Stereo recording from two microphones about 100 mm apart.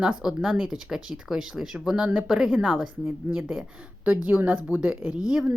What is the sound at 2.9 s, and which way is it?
A woman's voice, 20° right (ahead or behind).